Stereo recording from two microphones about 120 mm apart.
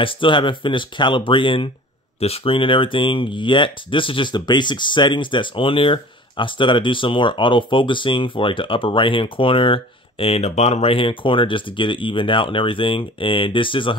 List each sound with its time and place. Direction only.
0.0 s speech: 45° left (ahead or behind)
2.1 s speech: 55° left (ahead or behind)